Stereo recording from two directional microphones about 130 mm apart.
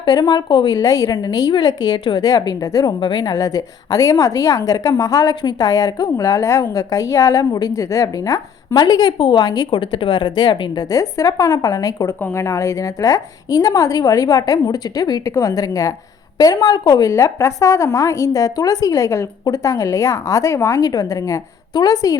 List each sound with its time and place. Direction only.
0.0 s a woman's voice: 35° left (ahead or behind)